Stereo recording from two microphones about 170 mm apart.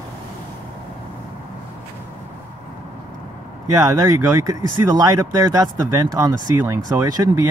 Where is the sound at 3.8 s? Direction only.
20° right (ahead or behind).